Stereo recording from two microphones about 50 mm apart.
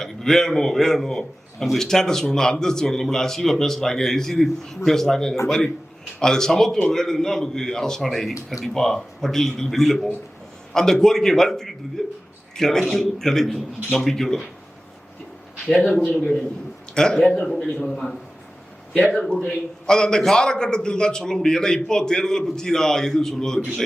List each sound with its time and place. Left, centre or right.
0.0 s a man's voice: centre
15.6 s a man's voice: centre
15.9 s a man's voice: left
16.9 s a man's voice: centre